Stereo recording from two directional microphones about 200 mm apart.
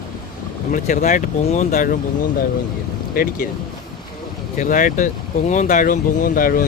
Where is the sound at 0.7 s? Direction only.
40° left (ahead or behind).